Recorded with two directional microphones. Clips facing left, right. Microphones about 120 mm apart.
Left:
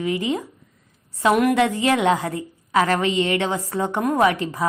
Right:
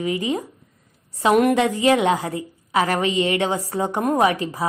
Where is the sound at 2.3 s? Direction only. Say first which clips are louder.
Left 1 dB; 20° right (ahead or behind).